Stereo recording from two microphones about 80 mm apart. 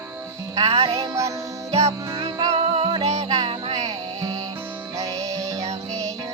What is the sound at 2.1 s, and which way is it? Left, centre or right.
Music, right.